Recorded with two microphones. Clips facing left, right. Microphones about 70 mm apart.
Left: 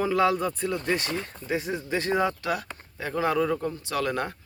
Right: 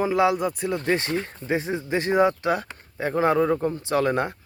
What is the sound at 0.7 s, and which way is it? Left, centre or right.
Speech, right.